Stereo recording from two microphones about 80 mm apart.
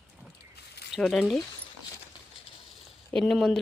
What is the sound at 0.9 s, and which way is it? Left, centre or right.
Speech, centre.